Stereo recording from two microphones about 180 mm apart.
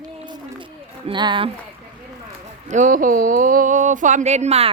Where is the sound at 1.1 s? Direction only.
25° right (ahead or behind).